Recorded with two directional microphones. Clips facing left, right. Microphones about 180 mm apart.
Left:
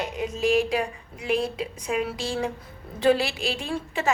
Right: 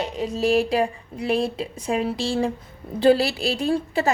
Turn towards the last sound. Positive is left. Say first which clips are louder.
# right 6 dB
turn(degrees=-35)  # may be behind; listen again after turning